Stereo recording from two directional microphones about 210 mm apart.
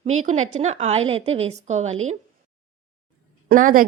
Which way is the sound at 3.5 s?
40° right (ahead or behind).